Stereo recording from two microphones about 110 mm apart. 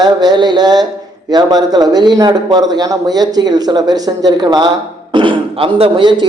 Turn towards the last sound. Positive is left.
turn(degrees=-45)  # may be behind; listen again after turning